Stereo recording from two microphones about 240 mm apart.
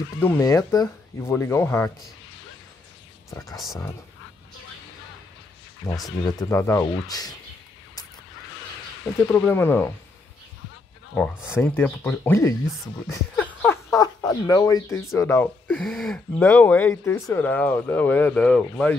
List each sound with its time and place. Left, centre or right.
0.2 s speech: centre
3.3 s speech: centre
3.5 s speech: centre
5.8 s speech: centre
9.3 s speech: centre
11.1 s speech: centre